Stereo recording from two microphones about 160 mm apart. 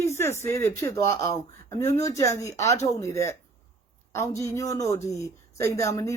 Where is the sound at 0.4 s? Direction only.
20° left (ahead or behind).